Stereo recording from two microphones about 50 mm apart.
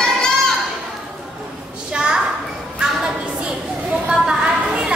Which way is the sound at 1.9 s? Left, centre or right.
Centre.